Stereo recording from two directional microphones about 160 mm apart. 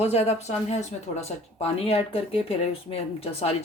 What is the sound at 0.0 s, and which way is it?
Speech, 45° left (ahead or behind).